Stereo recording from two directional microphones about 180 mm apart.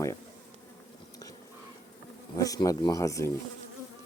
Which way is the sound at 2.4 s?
20° left (ahead or behind).